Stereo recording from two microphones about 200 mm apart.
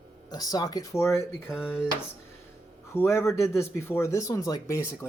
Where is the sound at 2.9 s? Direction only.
15° left (ahead or behind).